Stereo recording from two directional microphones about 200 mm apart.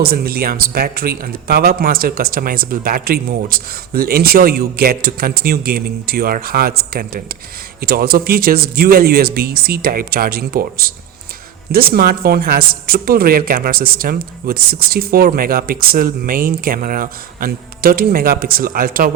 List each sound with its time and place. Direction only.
0.0 s speech: 50° right (ahead or behind)